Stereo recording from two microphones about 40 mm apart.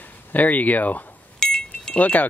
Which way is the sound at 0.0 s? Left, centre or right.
Left.